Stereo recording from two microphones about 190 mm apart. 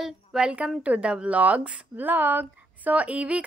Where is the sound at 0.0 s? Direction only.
5° right (ahead or behind).